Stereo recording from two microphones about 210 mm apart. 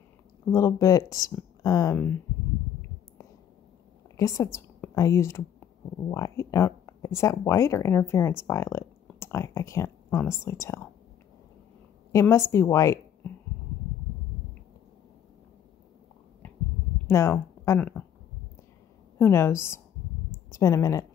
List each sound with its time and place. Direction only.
0.5 s speech: 15° left (ahead or behind)
4.2 s a woman's voice: 15° left (ahead or behind)
12.1 s a woman's voice: 15° left (ahead or behind)
17.1 s speech: 10° left (ahead or behind)
19.1 s speech: 10° left (ahead or behind)